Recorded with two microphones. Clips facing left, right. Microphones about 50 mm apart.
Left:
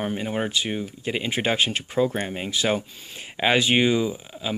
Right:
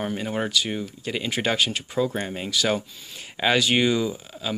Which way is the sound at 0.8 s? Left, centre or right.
Left.